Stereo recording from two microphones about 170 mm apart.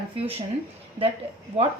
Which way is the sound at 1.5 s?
35° right (ahead or behind).